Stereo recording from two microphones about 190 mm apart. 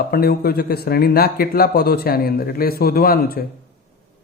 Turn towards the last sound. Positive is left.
turn(degrees=50)  # may be behind; listen again after turning